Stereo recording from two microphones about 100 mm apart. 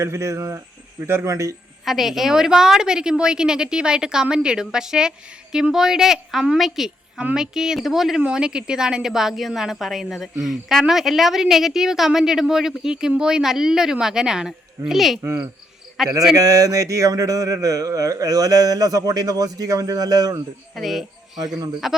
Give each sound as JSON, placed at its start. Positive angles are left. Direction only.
{"t": 0.0, "sound": "speech", "side_deg": -30}
{"t": 1.8, "sound": "a woman's voice", "side_deg": -5}
{"t": 15.2, "sound": "speech", "side_deg": -25}
{"t": 16.0, "sound": "a woman's voice", "side_deg": -5}
{"t": 16.3, "sound": "speech", "side_deg": -35}
{"t": 20.7, "sound": "a woman's voice", "side_deg": 0}